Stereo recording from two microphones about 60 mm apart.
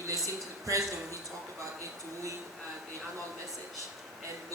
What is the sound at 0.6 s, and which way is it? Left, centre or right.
Speech, right.